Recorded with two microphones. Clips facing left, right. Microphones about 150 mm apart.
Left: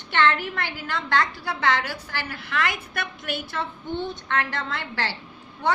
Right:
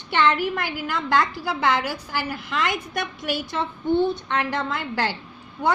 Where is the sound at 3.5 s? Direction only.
15° right (ahead or behind).